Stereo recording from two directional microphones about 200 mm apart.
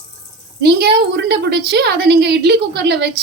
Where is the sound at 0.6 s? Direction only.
55° right (ahead or behind).